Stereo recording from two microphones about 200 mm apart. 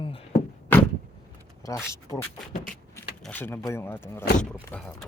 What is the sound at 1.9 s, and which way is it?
Speech, 15° left (ahead or behind).